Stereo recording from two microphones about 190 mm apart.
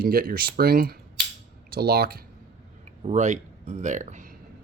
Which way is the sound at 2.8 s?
35° right (ahead or behind).